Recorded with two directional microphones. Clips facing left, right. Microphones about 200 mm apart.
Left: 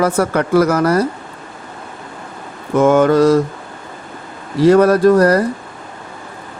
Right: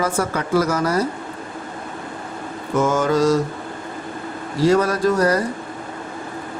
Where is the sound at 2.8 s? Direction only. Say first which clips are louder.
Left 7 dB; 60° left (ahead or behind).